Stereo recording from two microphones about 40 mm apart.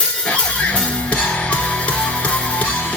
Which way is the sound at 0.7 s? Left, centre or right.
Left.